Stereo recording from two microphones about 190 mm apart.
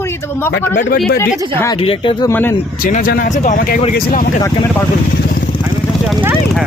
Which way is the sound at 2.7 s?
50° left (ahead or behind).